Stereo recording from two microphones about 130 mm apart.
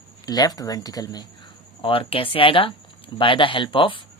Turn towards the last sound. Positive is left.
turn(degrees=40)  # may be behind; listen again after turning